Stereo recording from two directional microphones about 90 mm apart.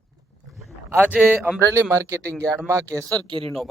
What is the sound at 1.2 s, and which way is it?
Speech, 20° right (ahead or behind).